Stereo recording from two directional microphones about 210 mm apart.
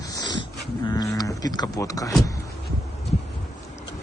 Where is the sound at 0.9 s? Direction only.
20° left (ahead or behind).